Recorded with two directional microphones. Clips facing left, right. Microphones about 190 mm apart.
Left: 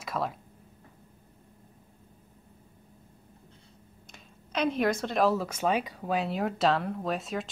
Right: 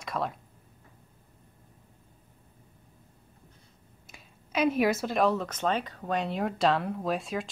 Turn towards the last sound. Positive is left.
turn(degrees=0)  # may be behind; listen again after turning